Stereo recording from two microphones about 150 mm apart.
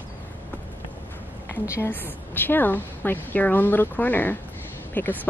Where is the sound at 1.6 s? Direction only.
20° left (ahead or behind).